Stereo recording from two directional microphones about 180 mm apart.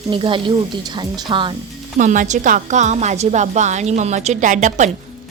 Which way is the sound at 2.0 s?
45° right (ahead or behind).